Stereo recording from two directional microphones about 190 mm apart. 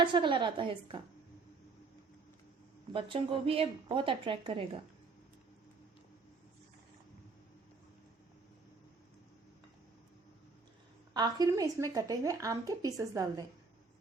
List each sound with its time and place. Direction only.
0.0 s a woman's voice: 25° right (ahead or behind)
2.9 s a woman's voice: 30° right (ahead or behind)
11.1 s a woman's voice: 20° right (ahead or behind)